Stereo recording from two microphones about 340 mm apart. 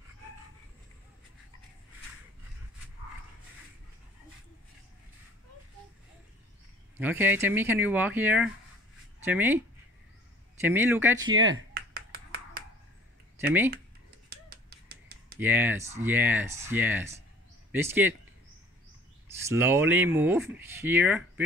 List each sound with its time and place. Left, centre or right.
7.0 s speech: centre
10.6 s speech: centre
11.5 s finger snapping: right
14.3 s finger snapping: right
15.3 s speech: centre
19.2 s speech: centre